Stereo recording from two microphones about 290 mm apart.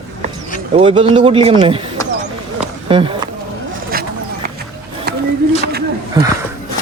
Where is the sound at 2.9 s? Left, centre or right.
Centre.